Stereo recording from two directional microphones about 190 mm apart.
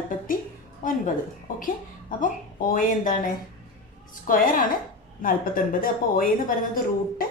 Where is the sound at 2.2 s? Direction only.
45° left (ahead or behind).